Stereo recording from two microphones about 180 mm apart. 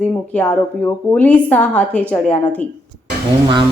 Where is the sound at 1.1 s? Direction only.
10° left (ahead or behind).